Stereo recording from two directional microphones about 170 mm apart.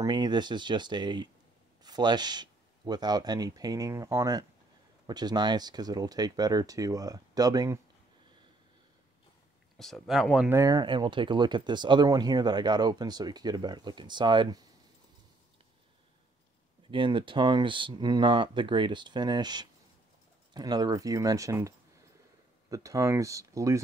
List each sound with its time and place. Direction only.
0.0 s speech: 25° right (ahead or behind)
9.8 s speech: centre (ahead or behind)
10.5 s speech: 20° right (ahead or behind)
16.9 s speech: 30° right (ahead or behind)